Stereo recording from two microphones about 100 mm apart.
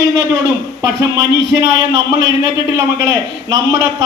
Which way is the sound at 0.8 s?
35° right (ahead or behind).